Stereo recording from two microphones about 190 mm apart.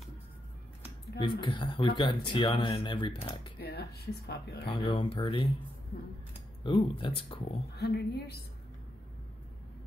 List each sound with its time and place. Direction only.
1.2 s speech: 25° left (ahead or behind)
3.5 s speech: 55° left (ahead or behind)
4.6 s speech: 25° left (ahead or behind)
6.6 s speech: 25° left (ahead or behind)
7.7 s speech: 60° left (ahead or behind)